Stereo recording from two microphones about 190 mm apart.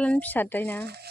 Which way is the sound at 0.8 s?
60° right (ahead or behind).